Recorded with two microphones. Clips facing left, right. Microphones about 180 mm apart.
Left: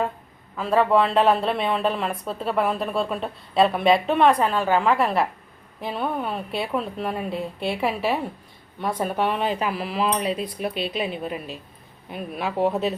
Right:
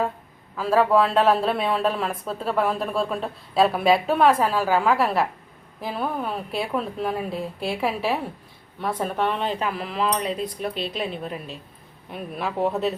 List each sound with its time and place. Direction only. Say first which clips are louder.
0.5 s speech: even; centre (ahead or behind)